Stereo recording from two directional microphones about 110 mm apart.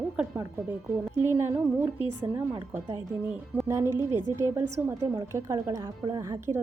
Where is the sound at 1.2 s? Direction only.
20° right (ahead or behind).